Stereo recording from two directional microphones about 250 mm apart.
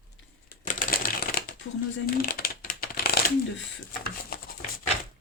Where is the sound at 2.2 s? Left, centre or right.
Left.